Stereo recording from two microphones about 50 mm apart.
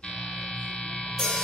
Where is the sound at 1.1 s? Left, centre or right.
Centre.